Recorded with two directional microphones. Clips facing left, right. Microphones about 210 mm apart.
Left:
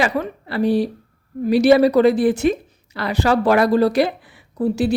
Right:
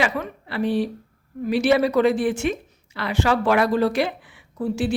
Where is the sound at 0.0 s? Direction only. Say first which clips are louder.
Left 4 dB; 40° left (ahead or behind).